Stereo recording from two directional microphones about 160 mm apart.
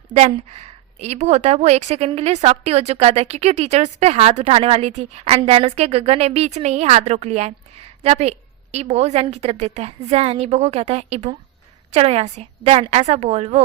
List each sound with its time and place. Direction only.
0.1 s a woman's voice: 40° right (ahead or behind)